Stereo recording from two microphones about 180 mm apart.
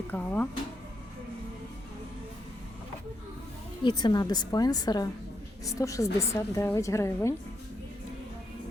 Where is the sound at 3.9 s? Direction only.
25° left (ahead or behind).